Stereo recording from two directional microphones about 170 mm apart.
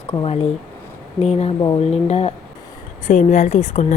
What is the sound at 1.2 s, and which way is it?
Speech, 40° left (ahead or behind).